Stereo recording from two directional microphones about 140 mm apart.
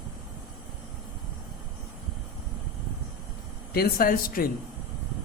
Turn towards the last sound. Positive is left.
turn(degrees=90)